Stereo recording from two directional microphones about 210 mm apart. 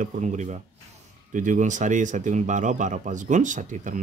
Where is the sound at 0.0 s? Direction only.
35° right (ahead or behind).